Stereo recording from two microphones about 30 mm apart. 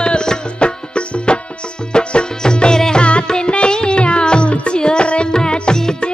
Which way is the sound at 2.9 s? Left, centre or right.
Left.